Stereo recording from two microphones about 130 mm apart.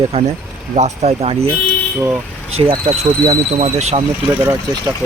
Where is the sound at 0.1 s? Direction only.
55° right (ahead or behind).